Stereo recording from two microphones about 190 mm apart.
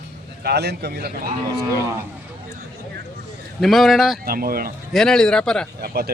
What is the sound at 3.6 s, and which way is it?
Speech, centre (ahead or behind).